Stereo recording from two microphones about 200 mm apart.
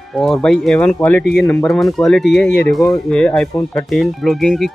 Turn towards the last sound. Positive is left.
turn(degrees=0)  # may be behind; listen again after turning